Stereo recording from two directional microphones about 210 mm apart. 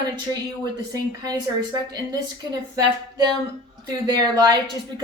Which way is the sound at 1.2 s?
20° right (ahead or behind).